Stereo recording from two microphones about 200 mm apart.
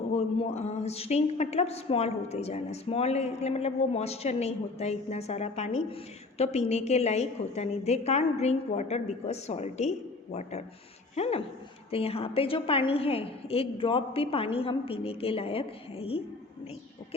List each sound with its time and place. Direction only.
0.1 s a woman's voice: 35° left (ahead or behind)
11.1 s a woman's voice: 30° left (ahead or behind)